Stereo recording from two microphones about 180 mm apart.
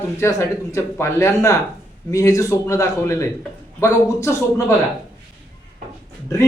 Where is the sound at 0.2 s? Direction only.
15° left (ahead or behind).